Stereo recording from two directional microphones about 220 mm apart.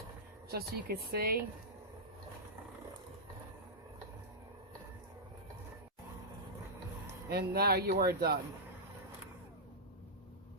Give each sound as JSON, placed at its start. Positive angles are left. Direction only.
{"t": 0.5, "sound": "speech", "side_deg": -45}
{"t": 7.3, "sound": "speech", "side_deg": -45}